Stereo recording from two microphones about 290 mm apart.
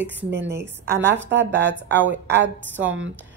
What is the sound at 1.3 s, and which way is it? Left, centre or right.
Speech, right.